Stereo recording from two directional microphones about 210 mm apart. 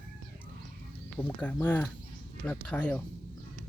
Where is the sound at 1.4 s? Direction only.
10° left (ahead or behind).